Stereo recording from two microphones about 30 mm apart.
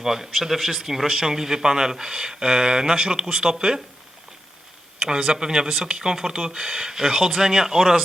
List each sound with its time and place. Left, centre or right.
0.0 s speech: centre
4.9 s speech: right
6.7 s speech: centre